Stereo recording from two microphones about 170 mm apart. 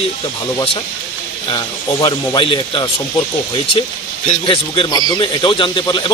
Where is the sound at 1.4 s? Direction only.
25° left (ahead or behind).